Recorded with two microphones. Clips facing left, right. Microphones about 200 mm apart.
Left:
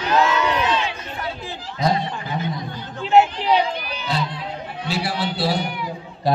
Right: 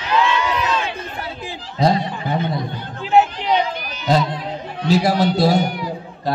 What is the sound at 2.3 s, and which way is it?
Chatter, 60° right (ahead or behind).